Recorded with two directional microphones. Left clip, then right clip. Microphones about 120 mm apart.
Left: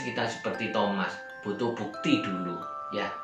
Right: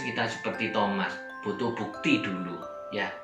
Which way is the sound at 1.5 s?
40° left (ahead or behind).